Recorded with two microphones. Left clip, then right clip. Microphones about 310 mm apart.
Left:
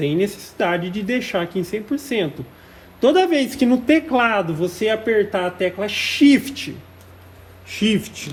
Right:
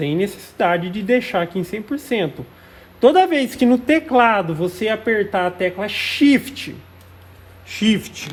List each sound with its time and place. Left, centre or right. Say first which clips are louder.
0.0 s a man's voice: left 1 dB; right
7.7 s a man's voice: right 1 dB; right